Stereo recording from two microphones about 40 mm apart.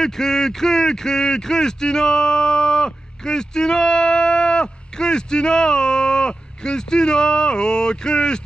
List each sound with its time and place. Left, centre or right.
0.0 s a man's voice: centre